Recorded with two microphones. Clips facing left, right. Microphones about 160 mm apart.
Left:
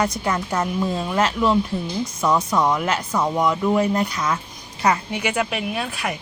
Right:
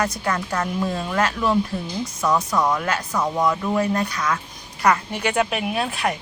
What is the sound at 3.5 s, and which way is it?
Speech, 20° left (ahead or behind).